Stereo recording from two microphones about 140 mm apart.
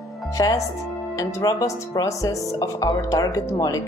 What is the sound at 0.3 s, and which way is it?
A woman's voice, 25° left (ahead or behind).